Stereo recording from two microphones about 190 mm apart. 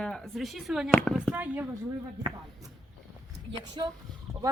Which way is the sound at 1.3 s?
5° right (ahead or behind).